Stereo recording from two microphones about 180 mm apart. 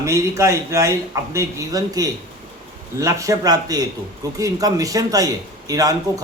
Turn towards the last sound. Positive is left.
turn(degrees=-20)  # may be behind; listen again after turning